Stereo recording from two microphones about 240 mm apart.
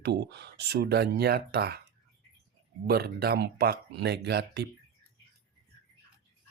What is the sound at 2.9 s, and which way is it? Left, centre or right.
Speech, right.